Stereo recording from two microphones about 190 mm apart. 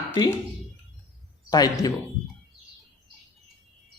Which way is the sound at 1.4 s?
20° left (ahead or behind).